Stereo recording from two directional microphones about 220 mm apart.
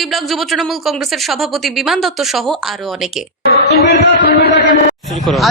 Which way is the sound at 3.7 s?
50° left (ahead or behind).